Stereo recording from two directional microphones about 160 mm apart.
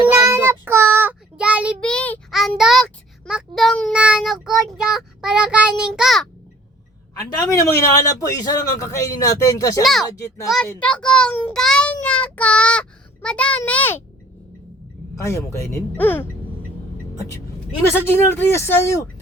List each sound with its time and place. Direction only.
0.1 s child singing: 15° right (ahead or behind)
1.8 s child singing: 5° left (ahead or behind)
7.1 s a man's voice: 20° left (ahead or behind)
9.8 s child singing: centre (ahead or behind)
15.1 s child singing: 20° left (ahead or behind)
17.9 s child singing: 15° left (ahead or behind)